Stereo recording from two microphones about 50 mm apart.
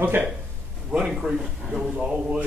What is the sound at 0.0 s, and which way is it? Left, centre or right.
Speech, right.